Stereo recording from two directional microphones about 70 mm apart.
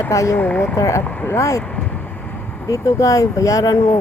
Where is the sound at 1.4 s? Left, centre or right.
Left.